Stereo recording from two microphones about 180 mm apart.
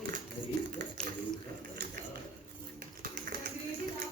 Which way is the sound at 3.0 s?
50° right (ahead or behind).